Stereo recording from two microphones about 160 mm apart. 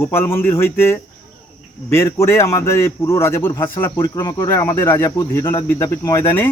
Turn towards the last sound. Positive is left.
turn(degrees=15)  # may be behind; listen again after turning